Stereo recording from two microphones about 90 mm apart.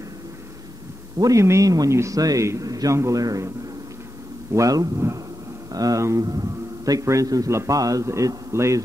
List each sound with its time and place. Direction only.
1.1 s speech: 35° right (ahead or behind)